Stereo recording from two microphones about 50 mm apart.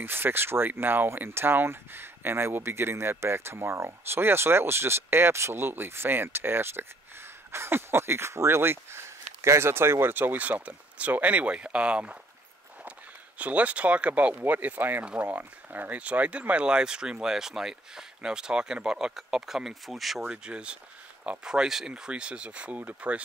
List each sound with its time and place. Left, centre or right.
0.0 s speech: right
10.1 s speech: right
13.4 s speech: right
15.0 s speech: right; by 20.2 s centre
20.2 s speech: right